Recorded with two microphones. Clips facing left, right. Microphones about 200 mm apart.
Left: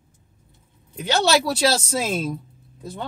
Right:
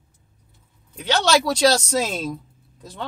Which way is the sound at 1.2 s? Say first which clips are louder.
Right 2 dB; 5° left (ahead or behind).